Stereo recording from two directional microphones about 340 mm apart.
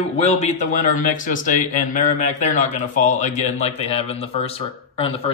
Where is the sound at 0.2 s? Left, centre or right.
Centre.